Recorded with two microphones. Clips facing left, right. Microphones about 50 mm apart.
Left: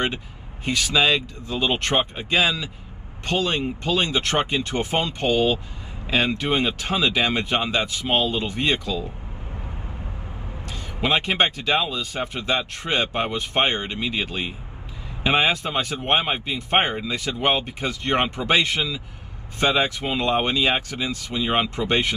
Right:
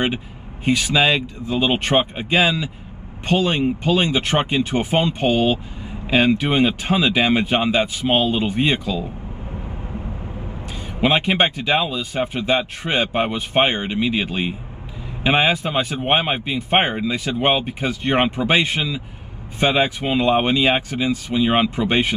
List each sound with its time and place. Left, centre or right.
0.7 s speech: right
6.6 s speech: right
10.7 s speech: centre
15.5 s speech: centre
20.5 s speech: right